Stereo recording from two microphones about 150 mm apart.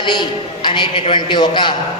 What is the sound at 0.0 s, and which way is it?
A man's voice, 30° left (ahead or behind).